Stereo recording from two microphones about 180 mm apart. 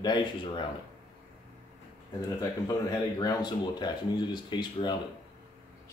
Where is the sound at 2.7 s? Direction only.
20° left (ahead or behind).